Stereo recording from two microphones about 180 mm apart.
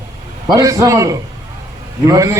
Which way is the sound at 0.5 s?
20° right (ahead or behind).